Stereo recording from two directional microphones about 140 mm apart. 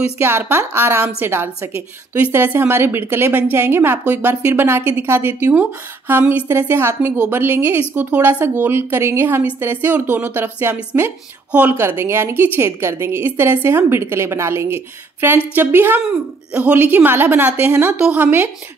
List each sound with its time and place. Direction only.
0.0 s a woman's voice: 15° right (ahead or behind)